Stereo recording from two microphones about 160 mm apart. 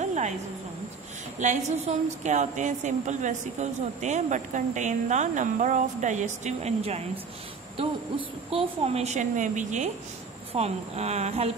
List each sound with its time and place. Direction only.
0.0 s a sound: 45° right (ahead or behind)
1.4 s a woman's voice: 45° right (ahead or behind)
8.5 s a woman's voice: 35° right (ahead or behind)